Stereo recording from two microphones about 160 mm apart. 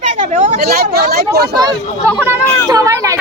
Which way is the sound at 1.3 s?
20° right (ahead or behind).